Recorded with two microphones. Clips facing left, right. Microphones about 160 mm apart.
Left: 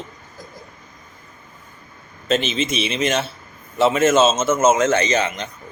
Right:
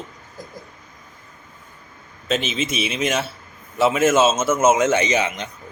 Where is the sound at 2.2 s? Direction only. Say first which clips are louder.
Left 3 dB; 5° right (ahead or behind).